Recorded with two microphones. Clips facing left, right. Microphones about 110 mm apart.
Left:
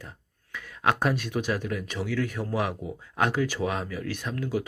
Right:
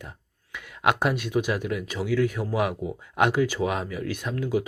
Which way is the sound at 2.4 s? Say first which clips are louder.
Right 3 dB; 10° right (ahead or behind).